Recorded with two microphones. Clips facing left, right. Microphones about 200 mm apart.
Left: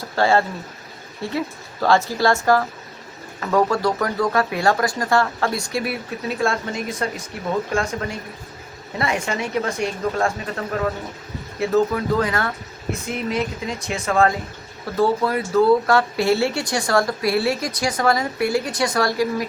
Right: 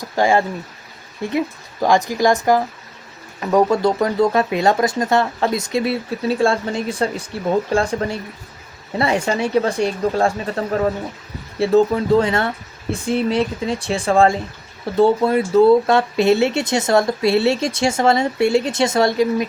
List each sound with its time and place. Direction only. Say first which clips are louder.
0.0 s speech: right 2 dB; 15° right (ahead or behind)